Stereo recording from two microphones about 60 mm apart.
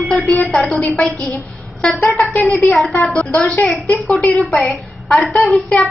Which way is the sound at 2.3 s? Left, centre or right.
Left.